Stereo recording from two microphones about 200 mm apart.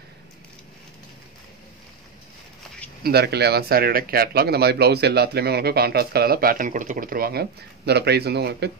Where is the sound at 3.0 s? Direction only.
55° right (ahead or behind).